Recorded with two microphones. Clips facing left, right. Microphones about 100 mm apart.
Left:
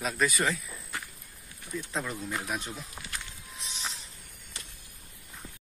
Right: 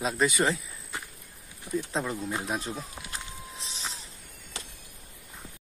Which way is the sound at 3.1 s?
30° right (ahead or behind).